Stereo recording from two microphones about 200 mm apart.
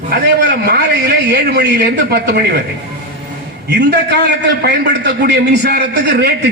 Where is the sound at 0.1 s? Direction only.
55° right (ahead or behind).